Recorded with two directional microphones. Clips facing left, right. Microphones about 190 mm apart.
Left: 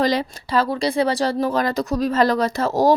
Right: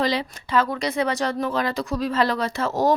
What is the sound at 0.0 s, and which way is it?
Speech, 45° left (ahead or behind).